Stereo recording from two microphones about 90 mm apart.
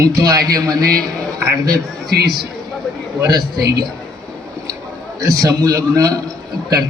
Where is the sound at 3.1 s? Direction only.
40° right (ahead or behind).